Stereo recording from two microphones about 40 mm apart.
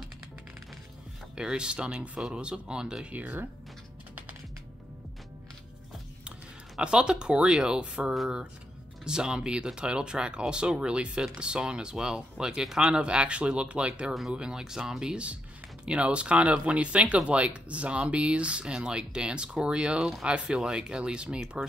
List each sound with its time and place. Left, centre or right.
1.3 s speech: centre
3.1 s speech: right
6.8 s speech: right
13.0 s speech: right
15.8 s speech: right